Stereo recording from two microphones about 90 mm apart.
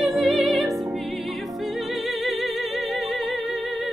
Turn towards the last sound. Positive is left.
turn(degrees=0)  # may be behind; listen again after turning